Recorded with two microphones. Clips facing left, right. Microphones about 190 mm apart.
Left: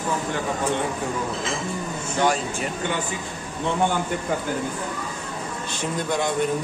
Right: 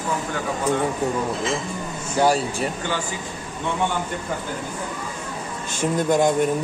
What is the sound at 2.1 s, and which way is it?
Speech, 35° right (ahead or behind).